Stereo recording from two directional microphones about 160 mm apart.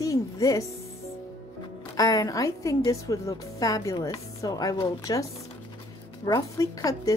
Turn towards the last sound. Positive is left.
turn(degrees=20)  # may be behind; listen again after turning